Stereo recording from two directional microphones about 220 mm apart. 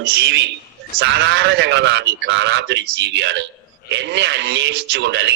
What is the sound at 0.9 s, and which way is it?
A man's voice, 50° right (ahead or behind).